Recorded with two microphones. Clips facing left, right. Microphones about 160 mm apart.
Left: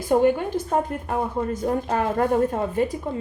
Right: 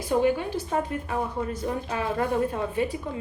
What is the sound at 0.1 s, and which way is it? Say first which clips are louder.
Speech: left 4 dB; 50° left (ahead or behind).